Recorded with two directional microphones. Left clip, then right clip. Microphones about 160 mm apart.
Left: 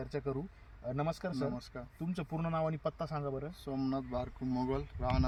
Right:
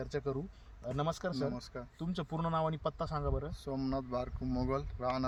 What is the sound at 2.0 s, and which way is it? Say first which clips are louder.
Speech: right 1 dB; 15° right (ahead or behind).